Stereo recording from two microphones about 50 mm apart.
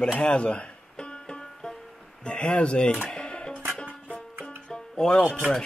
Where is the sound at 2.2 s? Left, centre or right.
Centre.